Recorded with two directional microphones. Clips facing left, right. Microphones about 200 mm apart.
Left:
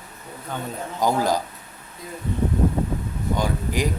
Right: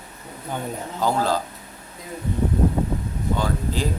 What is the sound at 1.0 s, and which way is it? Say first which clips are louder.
Speech: left 1 dB; 15° left (ahead or behind).